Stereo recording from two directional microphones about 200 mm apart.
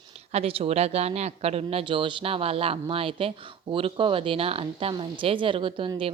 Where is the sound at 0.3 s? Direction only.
30° right (ahead or behind).